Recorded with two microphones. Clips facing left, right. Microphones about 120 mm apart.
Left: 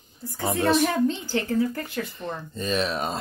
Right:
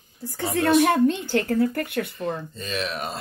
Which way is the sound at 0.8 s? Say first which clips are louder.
Right 4 dB; 65° right (ahead or behind).